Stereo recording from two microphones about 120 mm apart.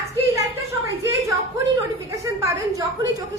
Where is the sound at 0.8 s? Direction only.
25° right (ahead or behind).